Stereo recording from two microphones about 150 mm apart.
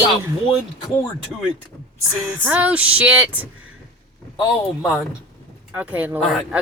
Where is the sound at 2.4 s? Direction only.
10° right (ahead or behind).